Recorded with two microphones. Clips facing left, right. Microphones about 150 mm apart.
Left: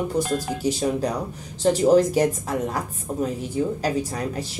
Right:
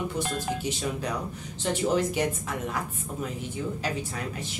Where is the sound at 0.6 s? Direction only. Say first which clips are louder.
Left 8 dB; 35° left (ahead or behind).